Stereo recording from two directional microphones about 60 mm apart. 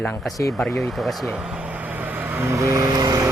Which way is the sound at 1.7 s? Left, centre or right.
Right.